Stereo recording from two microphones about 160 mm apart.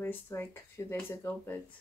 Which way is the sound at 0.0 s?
15° left (ahead or behind).